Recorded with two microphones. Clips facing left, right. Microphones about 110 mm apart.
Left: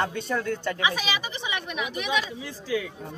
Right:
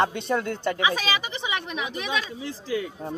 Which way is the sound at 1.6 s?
30° right (ahead or behind).